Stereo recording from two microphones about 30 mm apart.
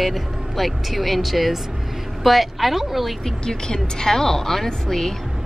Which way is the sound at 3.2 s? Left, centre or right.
Left.